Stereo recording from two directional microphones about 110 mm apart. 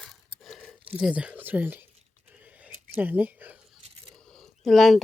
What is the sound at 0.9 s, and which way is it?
Speech, 10° right (ahead or behind).